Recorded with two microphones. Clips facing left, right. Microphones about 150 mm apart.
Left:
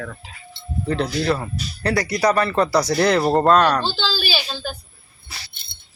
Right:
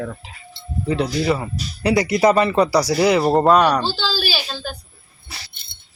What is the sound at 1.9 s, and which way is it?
Speech, 20° right (ahead or behind).